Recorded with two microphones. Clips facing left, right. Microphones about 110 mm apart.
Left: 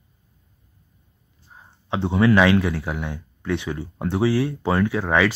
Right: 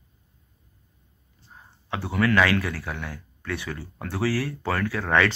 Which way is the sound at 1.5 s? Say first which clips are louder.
Left 6 dB; 20° left (ahead or behind).